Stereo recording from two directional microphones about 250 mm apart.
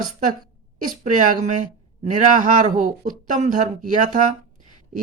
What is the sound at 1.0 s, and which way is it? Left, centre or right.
Speech, right.